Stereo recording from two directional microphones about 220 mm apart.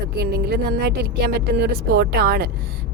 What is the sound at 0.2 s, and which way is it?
Speech, 45° right (ahead or behind).